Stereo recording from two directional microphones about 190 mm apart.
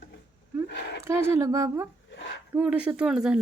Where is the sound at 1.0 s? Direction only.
15° right (ahead or behind).